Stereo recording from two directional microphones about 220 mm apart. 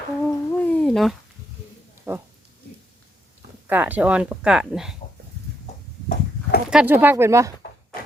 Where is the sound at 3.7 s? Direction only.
10° right (ahead or behind).